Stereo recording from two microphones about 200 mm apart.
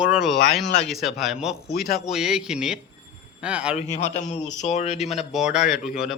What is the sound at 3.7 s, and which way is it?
Speech, 35° left (ahead or behind).